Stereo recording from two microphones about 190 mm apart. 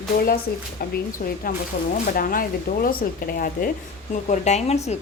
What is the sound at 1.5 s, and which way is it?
A woman's voice, 45° left (ahead or behind).